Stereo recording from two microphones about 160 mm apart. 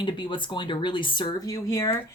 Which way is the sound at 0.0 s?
30° left (ahead or behind).